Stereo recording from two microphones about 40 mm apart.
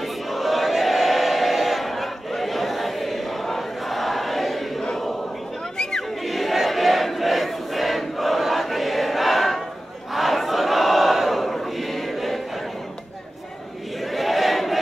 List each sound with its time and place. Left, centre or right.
0.0 s choir: centre
5.8 s music: centre
6.2 s crowd: centre
10.1 s battle cry: centre
14.1 s a sound: centre